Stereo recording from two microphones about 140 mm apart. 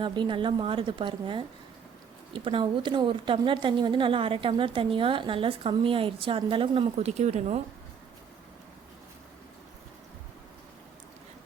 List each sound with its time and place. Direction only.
0.0 s a woman's voice: 35° right (ahead or behind)
6.9 s speech: 55° right (ahead or behind)